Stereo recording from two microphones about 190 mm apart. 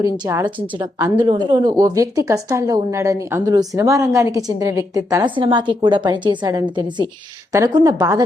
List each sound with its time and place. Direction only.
0.0 s speech: 15° right (ahead or behind)